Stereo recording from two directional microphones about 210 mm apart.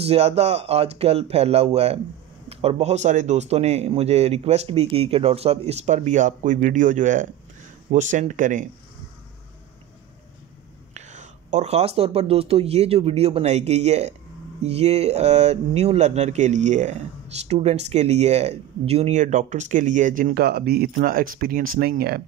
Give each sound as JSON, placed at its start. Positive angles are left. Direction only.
{"t": 0.0, "sound": "speech", "side_deg": -30}
{"t": 11.0, "sound": "speech", "side_deg": -35}